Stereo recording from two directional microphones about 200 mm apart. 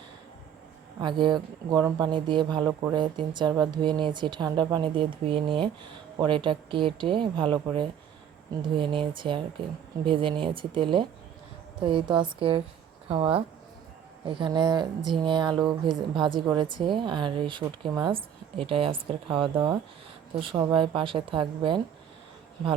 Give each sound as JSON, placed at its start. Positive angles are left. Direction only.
{"t": 1.0, "sound": "speech", "side_deg": -25}